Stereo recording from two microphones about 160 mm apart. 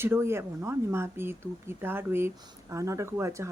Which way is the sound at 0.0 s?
15° right (ahead or behind).